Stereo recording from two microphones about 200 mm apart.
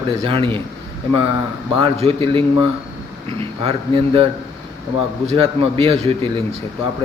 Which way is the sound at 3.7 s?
25° right (ahead or behind).